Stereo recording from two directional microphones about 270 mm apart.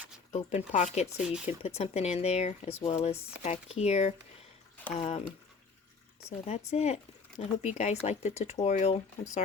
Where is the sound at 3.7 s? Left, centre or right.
Left.